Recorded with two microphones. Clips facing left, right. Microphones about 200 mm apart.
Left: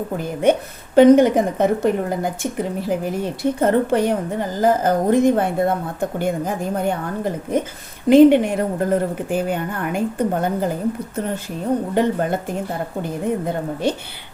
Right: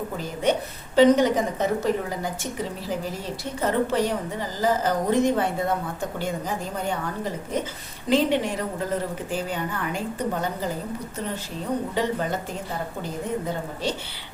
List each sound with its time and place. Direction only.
0.9 s a woman's voice: 55° left (ahead or behind)
11.9 s a woman's voice: 55° left (ahead or behind)